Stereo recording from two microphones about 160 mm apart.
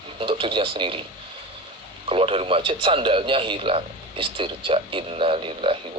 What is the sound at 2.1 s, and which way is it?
A man's voice, 35° right (ahead or behind).